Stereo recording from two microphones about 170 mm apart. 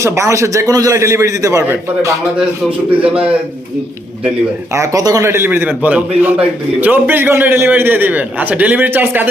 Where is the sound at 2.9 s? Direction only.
5° right (ahead or behind).